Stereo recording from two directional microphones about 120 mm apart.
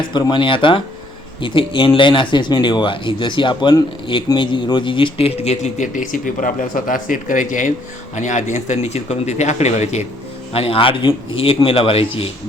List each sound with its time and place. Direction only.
0.1 s speech: 40° left (ahead or behind); by 10.1 s 70° left (ahead or behind)
10.5 s speech: 50° left (ahead or behind)